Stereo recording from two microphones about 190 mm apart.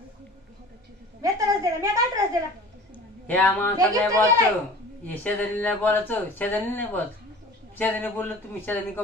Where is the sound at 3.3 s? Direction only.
10° left (ahead or behind).